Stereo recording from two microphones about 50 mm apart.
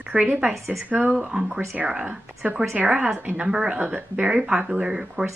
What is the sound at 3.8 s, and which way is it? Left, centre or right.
A woman's voice, right.